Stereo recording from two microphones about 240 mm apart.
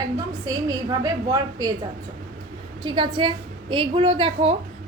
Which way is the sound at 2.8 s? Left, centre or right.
Centre.